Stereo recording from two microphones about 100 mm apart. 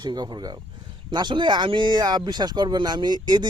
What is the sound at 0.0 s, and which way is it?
Speech, 45° right (ahead or behind).